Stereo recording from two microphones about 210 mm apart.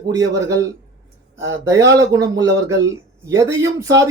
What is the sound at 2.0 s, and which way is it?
Speech, 15° right (ahead or behind).